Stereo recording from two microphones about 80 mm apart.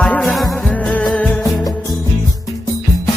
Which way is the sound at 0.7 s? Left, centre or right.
Centre.